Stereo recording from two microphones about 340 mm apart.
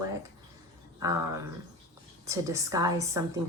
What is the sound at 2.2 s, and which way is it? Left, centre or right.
Speech, centre.